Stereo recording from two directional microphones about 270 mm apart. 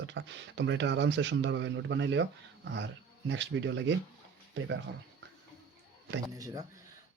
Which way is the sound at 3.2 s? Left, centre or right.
Right.